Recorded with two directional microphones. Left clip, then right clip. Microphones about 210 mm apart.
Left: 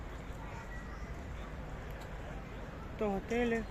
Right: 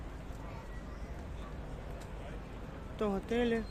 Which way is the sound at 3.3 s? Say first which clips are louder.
Right 1 dB; 15° right (ahead or behind).